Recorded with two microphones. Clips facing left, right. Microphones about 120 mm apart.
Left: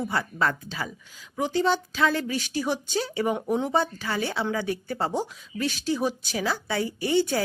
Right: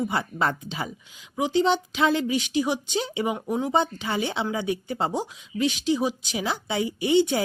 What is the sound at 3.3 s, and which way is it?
Speech, 5° right (ahead or behind).